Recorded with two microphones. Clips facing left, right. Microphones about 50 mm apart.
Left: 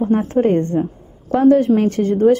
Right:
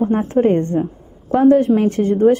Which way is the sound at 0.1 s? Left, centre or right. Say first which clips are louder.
Left 2 dB; right.